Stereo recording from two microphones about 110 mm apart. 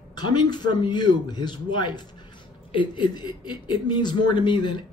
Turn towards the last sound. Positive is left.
turn(degrees=45)  # may be behind; listen again after turning